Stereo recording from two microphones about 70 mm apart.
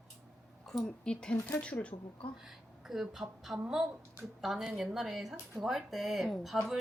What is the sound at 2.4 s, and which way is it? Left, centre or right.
A woman's voice, centre.